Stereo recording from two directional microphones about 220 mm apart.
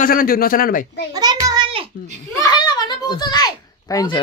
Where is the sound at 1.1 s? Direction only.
15° right (ahead or behind).